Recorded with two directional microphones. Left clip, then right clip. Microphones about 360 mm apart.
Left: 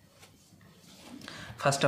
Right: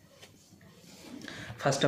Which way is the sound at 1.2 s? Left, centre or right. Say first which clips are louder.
Left 1 dB; left.